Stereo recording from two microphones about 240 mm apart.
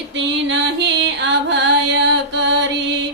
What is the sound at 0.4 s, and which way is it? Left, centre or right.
Music, right.